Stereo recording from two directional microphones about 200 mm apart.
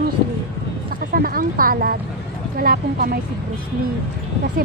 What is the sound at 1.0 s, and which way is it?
Speech, 45° right (ahead or behind).